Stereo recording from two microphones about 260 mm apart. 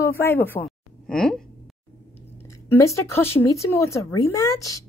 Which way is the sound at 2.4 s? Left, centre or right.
Centre.